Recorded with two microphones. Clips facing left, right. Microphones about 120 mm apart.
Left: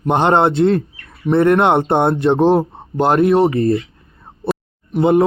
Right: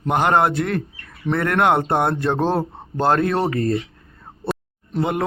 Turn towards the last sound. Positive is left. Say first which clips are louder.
# left 9 dB
turn(degrees=25)  # may be behind; listen again after turning